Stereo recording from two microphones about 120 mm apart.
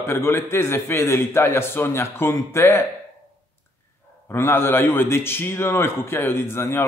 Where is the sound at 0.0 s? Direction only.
20° left (ahead or behind).